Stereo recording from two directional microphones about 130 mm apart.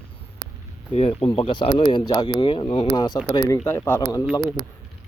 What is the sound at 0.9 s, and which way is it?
Speech, 50° left (ahead or behind).